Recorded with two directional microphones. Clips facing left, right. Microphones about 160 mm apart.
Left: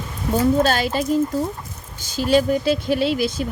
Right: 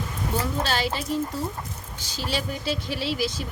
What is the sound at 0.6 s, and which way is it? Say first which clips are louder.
Speech: left 7 dB; 50° left (ahead or behind).